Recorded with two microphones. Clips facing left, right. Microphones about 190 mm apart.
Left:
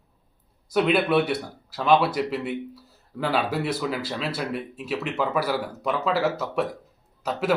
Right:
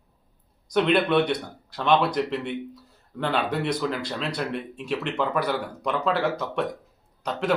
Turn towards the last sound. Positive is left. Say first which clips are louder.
# left 1 dB
turn(degrees=5)  # may be behind; listen again after turning